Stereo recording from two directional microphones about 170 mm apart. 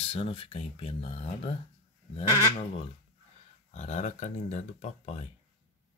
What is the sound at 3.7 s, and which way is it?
Speech, 45° left (ahead or behind).